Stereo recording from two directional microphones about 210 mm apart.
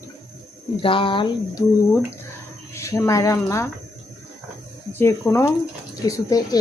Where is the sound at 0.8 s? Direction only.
25° left (ahead or behind).